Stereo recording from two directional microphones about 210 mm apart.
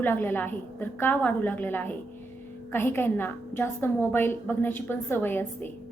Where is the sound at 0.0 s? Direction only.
10° left (ahead or behind).